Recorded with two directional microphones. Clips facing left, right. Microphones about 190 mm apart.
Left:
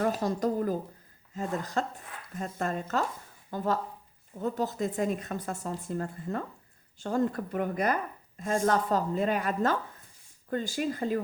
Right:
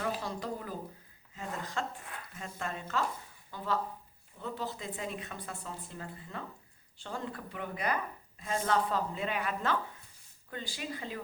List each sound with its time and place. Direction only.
0.0 s speech: 45° left (ahead or behind)